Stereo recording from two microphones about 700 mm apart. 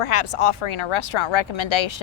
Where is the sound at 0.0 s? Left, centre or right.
Left.